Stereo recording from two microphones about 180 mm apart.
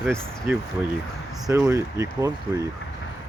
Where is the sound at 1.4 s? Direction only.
15° right (ahead or behind).